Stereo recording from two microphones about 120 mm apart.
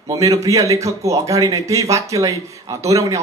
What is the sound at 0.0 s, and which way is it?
Speech, 25° right (ahead or behind).